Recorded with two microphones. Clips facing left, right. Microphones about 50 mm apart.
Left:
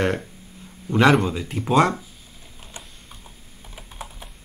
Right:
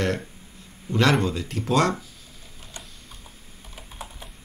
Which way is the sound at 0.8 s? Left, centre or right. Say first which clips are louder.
Left 4 dB; centre.